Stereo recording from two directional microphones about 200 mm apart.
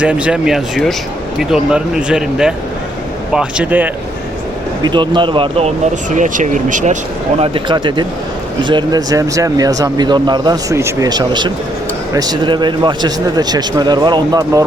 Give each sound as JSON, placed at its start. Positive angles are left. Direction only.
{"t": 0.0, "sound": "speech", "side_deg": -5}
{"t": 4.8, "sound": "speech", "side_deg": -25}
{"t": 7.3, "sound": "speech", "side_deg": -25}